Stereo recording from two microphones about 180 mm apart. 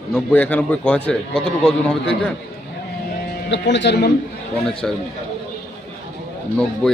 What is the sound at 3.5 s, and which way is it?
Speech, 80° left.